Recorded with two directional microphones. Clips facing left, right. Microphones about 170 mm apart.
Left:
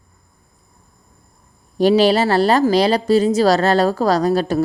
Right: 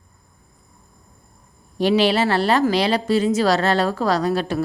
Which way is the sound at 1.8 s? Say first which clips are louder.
Left 4 dB; 40° left (ahead or behind).